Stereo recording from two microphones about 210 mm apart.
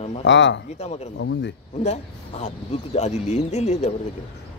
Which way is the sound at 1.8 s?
30° left (ahead or behind).